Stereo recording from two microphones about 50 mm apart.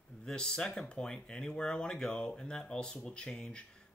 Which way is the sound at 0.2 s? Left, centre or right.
Centre.